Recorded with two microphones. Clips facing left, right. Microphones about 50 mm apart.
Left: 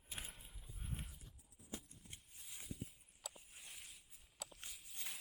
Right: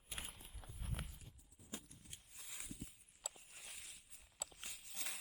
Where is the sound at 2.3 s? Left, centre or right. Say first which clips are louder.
Right 3 dB; right.